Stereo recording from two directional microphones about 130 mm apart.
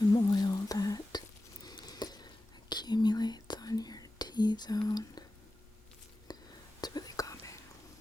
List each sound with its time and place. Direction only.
0.1 s whispering: 30° left (ahead or behind)
6.3 s whispering: 30° left (ahead or behind)